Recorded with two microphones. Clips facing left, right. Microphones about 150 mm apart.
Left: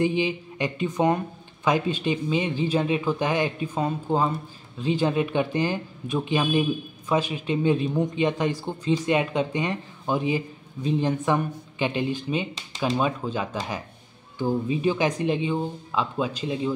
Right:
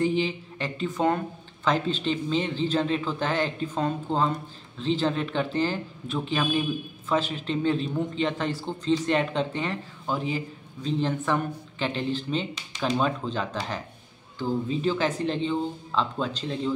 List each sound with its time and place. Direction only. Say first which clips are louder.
0.0 s speech: left 1 dB; 15° left (ahead or behind)